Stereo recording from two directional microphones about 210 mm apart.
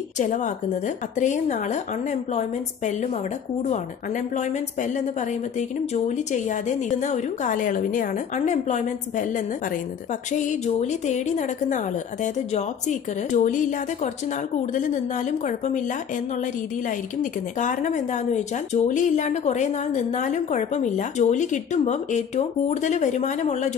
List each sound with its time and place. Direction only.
0.2 s speech: 35° left (ahead or behind)
5.6 s speech: 35° left (ahead or behind)
10.3 s speech: 35° left (ahead or behind)
17.2 s speech: 35° left (ahead or behind)